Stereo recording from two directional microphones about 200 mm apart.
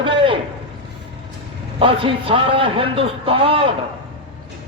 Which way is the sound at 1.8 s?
25° right (ahead or behind).